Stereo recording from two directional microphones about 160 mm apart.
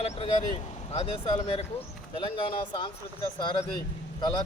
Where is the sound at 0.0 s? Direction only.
40° left (ahead or behind).